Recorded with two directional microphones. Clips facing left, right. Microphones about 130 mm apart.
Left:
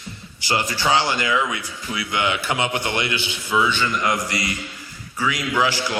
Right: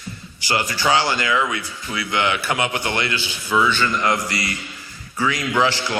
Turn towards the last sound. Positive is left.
turn(degrees=10)  # may be behind; listen again after turning